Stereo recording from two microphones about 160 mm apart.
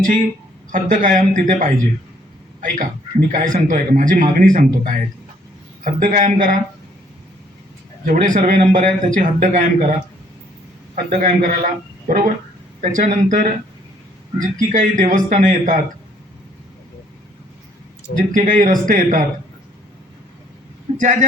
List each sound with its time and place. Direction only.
0.7 s a man's voice: 55° right (ahead or behind)
8.0 s speech: 55° right (ahead or behind)
10.9 s a man's voice: 60° right (ahead or behind)
18.2 s a man's voice: 55° right (ahead or behind)
21.0 s speech: 50° right (ahead or behind)